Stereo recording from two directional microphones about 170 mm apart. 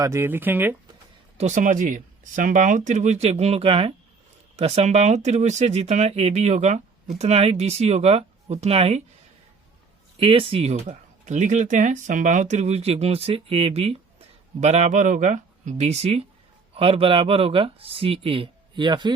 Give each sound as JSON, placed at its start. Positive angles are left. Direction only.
{"t": 0.0, "sound": "speech", "side_deg": -15}
{"t": 1.4, "sound": "speech", "side_deg": -45}
{"t": 10.2, "sound": "speech", "side_deg": -30}